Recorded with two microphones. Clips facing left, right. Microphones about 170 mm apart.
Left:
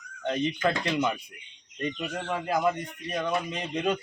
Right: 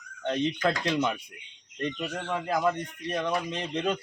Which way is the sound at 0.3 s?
5° left (ahead or behind).